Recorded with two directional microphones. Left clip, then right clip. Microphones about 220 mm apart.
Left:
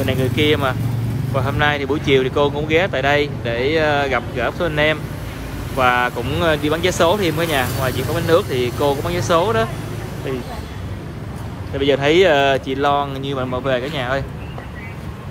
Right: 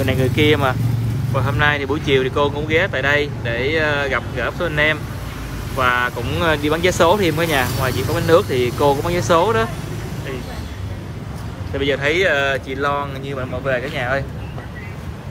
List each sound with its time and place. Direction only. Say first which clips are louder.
0.0 s speech: right 1 dB; 10° left (ahead or behind)
11.7 s speech: left 3 dB; 15° left (ahead or behind)